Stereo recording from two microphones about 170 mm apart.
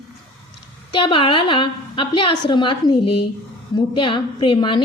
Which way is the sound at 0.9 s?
30° left (ahead or behind).